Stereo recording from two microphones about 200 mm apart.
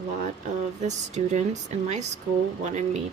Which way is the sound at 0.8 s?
35° right (ahead or behind).